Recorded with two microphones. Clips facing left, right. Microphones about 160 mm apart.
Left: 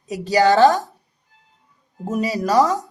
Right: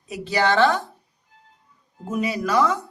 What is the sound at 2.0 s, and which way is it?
Speech, 40° left (ahead or behind).